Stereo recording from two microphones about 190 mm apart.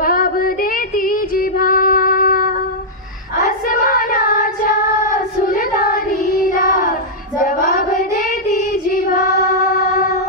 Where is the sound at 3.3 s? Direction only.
50° left (ahead or behind).